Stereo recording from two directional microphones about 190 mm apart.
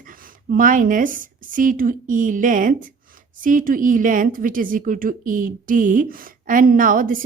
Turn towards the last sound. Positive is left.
turn(degrees=-45)  # may be behind; listen again after turning